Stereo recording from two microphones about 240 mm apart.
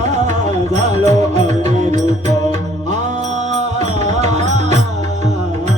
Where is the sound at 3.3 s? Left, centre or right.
Right.